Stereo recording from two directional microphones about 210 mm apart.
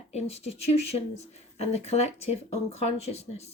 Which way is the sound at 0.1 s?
30° left (ahead or behind).